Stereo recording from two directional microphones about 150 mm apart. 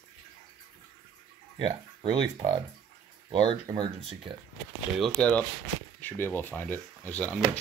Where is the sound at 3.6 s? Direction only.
30° right (ahead or behind).